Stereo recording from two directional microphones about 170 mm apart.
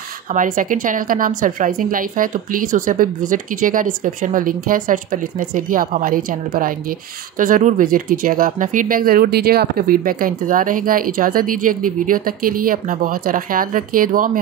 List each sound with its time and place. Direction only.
0.3 s a woman's voice: 50° right (ahead or behind)
7.3 s speech: 50° right (ahead or behind)